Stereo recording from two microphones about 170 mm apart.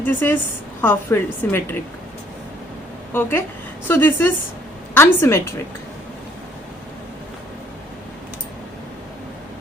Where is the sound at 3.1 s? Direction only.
10° left (ahead or behind).